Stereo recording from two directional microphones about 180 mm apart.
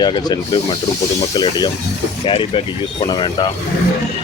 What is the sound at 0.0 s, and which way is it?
Speech, 25° left (ahead or behind).